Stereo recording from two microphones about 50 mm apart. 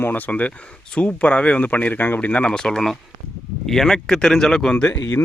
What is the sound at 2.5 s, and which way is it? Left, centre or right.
Speech, centre.